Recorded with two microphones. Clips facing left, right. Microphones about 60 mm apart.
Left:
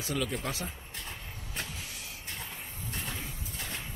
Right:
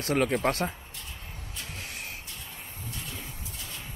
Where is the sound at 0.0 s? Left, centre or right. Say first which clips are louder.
Right 8 dB; right.